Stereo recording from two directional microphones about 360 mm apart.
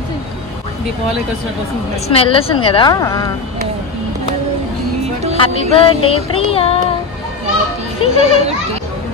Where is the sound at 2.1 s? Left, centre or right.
Centre.